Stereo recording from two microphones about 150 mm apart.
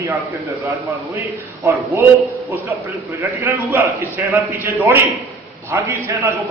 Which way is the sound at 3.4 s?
15° right (ahead or behind).